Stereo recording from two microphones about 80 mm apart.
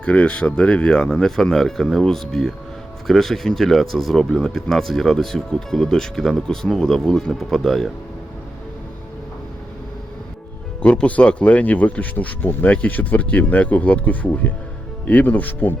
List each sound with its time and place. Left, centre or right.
0.0 s speech: centre
10.8 s speech: centre